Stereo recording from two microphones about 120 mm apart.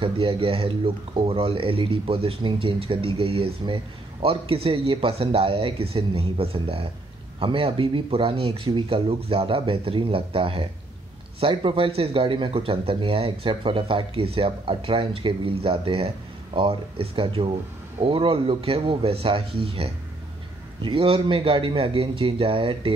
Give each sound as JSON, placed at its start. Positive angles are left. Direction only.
{"t": 0.0, "sound": "speech", "side_deg": -50}